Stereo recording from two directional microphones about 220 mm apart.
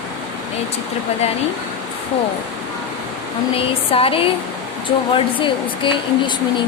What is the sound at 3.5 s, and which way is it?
Speech, 25° left (ahead or behind).